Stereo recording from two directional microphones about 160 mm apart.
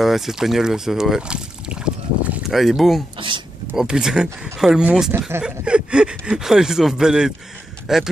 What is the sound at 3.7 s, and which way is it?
Speech, 5° right (ahead or behind).